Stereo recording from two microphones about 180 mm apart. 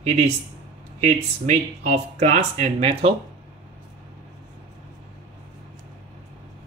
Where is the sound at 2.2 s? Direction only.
40° right (ahead or behind).